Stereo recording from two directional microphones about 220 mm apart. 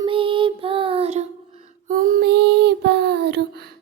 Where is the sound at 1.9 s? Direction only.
40° right (ahead or behind).